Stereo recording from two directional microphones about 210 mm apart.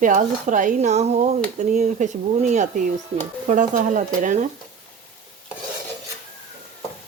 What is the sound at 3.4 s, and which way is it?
Speech, 35° right (ahead or behind).